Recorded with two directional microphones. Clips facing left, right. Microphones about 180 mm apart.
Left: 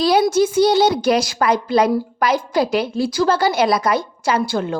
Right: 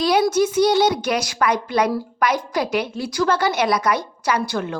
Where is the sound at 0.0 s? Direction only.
30° left (ahead or behind).